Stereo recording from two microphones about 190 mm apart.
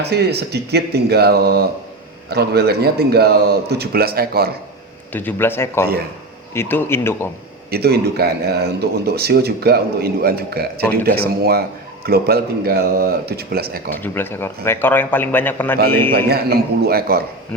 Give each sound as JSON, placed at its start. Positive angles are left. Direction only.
{"t": 0.0, "sound": "speech", "side_deg": -60}
{"t": 5.1, "sound": "a man's voice", "side_deg": 10}
{"t": 7.7, "sound": "speech", "side_deg": -55}
{"t": 14.0, "sound": "a man's voice", "side_deg": 10}
{"t": 16.3, "sound": "speech", "side_deg": -55}